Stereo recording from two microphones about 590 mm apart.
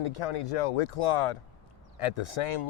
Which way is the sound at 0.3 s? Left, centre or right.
Left.